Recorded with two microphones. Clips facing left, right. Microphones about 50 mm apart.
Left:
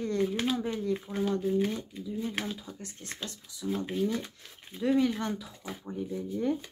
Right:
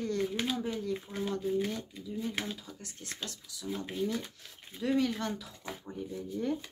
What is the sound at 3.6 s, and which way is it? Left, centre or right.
Speech, centre.